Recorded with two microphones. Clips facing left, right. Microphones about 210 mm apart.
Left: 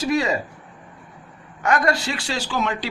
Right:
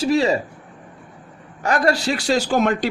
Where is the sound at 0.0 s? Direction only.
30° right (ahead or behind).